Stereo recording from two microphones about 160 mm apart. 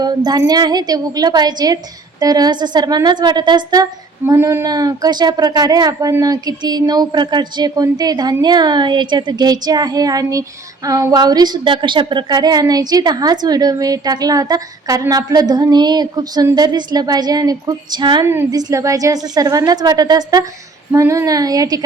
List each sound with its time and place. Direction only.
0.0 s a woman's voice: 25° right (ahead or behind)